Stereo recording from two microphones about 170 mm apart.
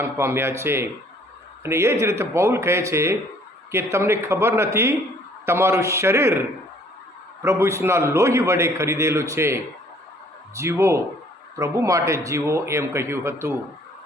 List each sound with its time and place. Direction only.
0.0 s a man's voice: 15° right (ahead or behind)
7.4 s a man's voice: 15° right (ahead or behind)